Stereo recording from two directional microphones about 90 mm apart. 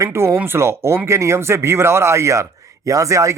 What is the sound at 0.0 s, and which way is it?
Speech, 30° right (ahead or behind).